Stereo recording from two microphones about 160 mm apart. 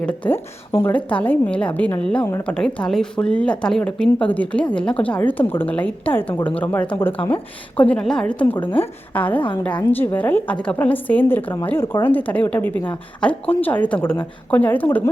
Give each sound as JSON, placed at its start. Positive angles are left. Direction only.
{"t": 0.0, "sound": "speech", "side_deg": 10}
{"t": 2.6, "sound": "speech", "side_deg": 5}